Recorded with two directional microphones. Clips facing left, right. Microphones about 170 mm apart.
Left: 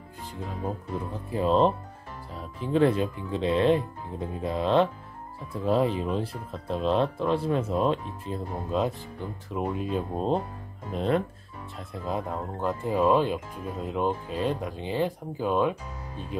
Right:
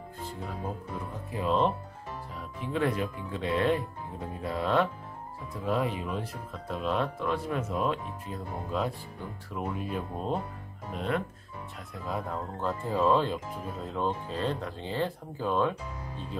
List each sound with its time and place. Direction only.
1.3 s speech: 35° left (ahead or behind)
11.9 s speech: 20° left (ahead or behind)